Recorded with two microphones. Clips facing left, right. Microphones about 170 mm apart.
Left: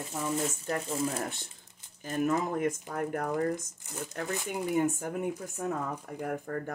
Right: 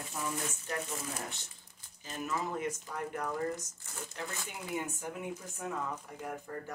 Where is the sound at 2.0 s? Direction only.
50° left (ahead or behind).